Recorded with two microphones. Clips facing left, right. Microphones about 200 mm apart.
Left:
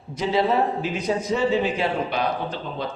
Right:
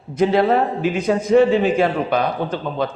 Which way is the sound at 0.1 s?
55° right (ahead or behind).